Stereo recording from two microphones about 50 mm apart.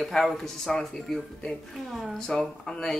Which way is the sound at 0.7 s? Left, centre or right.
Centre.